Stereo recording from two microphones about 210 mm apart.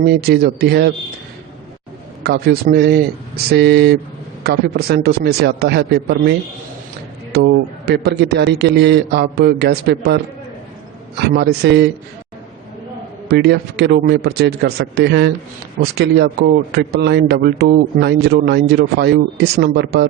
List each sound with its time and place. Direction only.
0.0 s a man's voice: 50° right (ahead or behind)
2.2 s a man's voice: 50° right (ahead or behind)
7.3 s a man's voice: 50° right (ahead or behind)
11.2 s a man's voice: 50° right (ahead or behind)
13.2 s a man's voice: 50° right (ahead or behind)